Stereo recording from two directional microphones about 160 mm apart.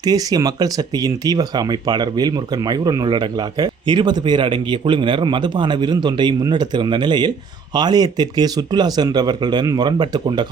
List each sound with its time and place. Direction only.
0.0 s speech: 25° right (ahead or behind)